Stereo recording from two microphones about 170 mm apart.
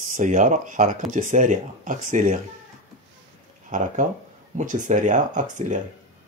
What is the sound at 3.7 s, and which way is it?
Speech, 50° right (ahead or behind).